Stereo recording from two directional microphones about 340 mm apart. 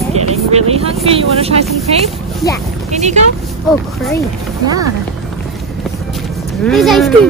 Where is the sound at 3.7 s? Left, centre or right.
Centre.